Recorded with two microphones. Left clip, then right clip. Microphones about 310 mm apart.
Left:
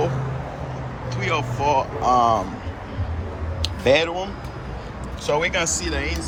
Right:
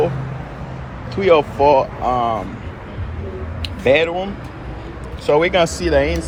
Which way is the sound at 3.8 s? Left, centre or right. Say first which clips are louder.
Right 4 dB; centre.